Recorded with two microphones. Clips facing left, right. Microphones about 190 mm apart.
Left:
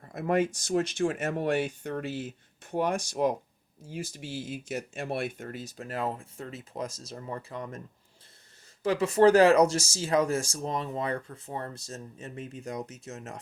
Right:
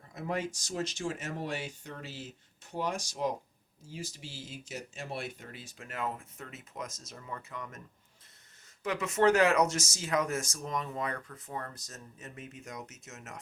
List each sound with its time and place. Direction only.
0.1 s speech: 55° left (ahead or behind); by 7.8 s 35° left (ahead or behind)
8.8 s speech: 30° left (ahead or behind)